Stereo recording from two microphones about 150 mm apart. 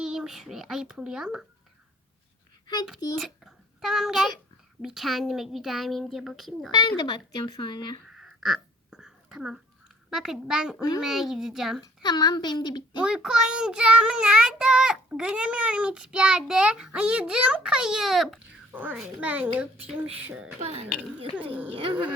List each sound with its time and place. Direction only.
0.0 s child singing: 5° right (ahead or behind)
3.2 s a child's voice: centre (ahead or behind)
4.8 s child singing: 5° right (ahead or behind)
6.7 s speech: 25° left (ahead or behind)
8.2 s whispering: centre (ahead or behind)
10.1 s child singing: 5° right (ahead or behind)
10.8 s speech: 20° left (ahead or behind)
11.0 s child singing: centre (ahead or behind)
11.8 s speech: 30° left (ahead or behind)
13.0 s child singing: 5° right (ahead or behind)
18.7 s a child's voice: 10° right (ahead or behind)
20.6 s speech: 45° right (ahead or behind)
21.3 s a child's voice: 10° right (ahead or behind)